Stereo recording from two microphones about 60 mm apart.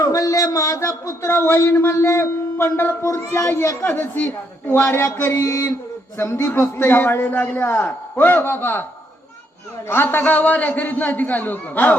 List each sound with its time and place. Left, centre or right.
0.0 s a sound: left
1.0 s a man's voice: left
3.8 s a man's voice: left
4.7 s a man's voice: left
6.7 s a man's voice: left
9.9 s a man's voice: left